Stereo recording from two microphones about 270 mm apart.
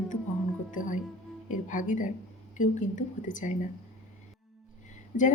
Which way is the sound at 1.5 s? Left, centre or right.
Left.